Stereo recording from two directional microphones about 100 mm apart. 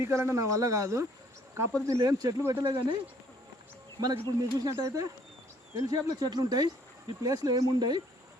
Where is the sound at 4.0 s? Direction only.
45° right (ahead or behind).